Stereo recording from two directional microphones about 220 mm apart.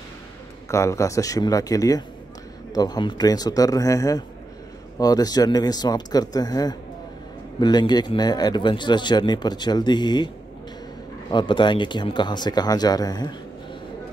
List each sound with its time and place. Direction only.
0.7 s speech: 15° left (ahead or behind)